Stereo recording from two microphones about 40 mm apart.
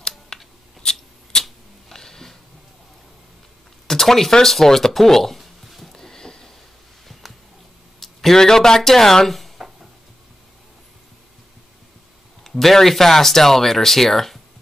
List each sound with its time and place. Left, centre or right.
0.3 s scissors: centre
1.4 s camera: centre
3.8 s speech: centre
5.9 s a sound: centre
7.2 s a sound: centre
8.0 s speech: centre
12.4 s speech: centre